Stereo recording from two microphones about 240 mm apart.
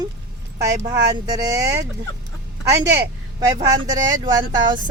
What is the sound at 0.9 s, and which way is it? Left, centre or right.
Speech, centre.